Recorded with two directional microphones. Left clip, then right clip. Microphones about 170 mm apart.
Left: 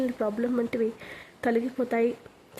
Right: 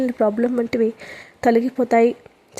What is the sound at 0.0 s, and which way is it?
Speech, 25° right (ahead or behind).